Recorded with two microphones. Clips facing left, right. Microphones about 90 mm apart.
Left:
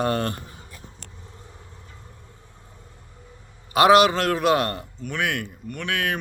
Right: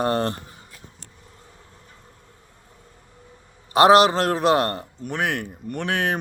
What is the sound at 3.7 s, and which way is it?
Speech, 35° right (ahead or behind).